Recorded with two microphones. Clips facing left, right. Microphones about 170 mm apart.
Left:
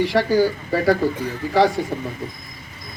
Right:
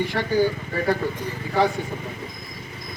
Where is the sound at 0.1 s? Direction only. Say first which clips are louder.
Left 4 dB; 90° left.